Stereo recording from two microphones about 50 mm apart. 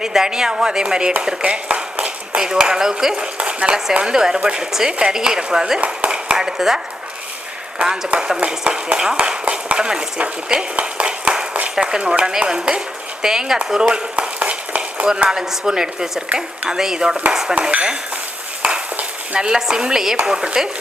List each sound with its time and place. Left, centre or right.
0.0 s speech: centre
5.8 s speech: right
14.3 s a sound: right
15.0 s speech: centre
17.5 s speech: right